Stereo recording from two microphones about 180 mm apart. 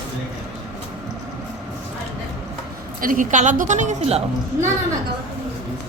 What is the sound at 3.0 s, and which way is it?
Speech, 50° right (ahead or behind).